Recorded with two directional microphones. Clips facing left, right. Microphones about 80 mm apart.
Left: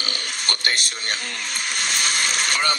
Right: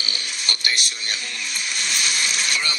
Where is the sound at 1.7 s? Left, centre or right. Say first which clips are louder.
Left 2 dB; left.